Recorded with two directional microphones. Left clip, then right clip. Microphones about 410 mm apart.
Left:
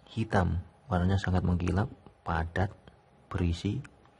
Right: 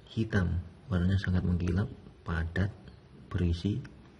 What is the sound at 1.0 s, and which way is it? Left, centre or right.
Speech, left.